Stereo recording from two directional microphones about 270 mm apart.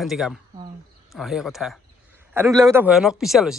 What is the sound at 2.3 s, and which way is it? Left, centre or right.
Speech, centre.